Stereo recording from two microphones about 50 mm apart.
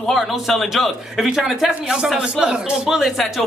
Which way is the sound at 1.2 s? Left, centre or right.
Centre.